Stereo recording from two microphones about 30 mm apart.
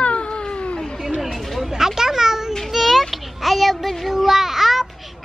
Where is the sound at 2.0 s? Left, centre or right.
Centre.